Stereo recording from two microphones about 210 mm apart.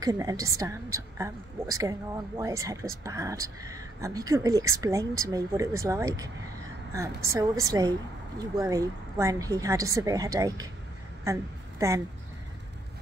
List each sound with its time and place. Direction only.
0.0 s a woman's voice: 15° right (ahead or behind)